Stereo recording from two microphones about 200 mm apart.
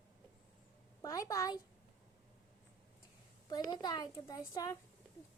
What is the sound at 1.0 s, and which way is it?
Speech, 15° left (ahead or behind).